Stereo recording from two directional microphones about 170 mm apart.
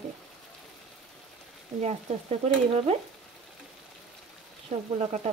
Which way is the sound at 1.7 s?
40° right (ahead or behind).